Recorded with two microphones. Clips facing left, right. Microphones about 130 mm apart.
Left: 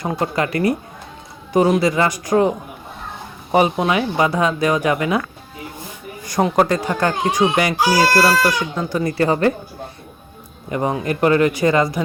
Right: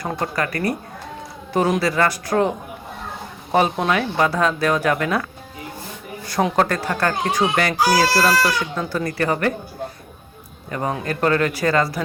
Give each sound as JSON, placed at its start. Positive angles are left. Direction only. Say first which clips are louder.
{"t": 0.3, "sound": "a woman's voice", "louder": "left 6 dB", "side_deg": 20}
{"t": 3.5, "sound": "speech", "louder": "left 2 dB", "side_deg": 10}
{"t": 6.6, "sound": "speech", "louder": "left 5 dB", "side_deg": 15}
{"t": 9.0, "sound": "a woman's voice", "louder": "left 5 dB", "side_deg": 25}
{"t": 10.7, "sound": "speech", "louder": "left 4 dB", "side_deg": 15}